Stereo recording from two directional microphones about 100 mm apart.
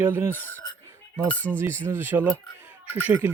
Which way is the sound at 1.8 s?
20° right (ahead or behind).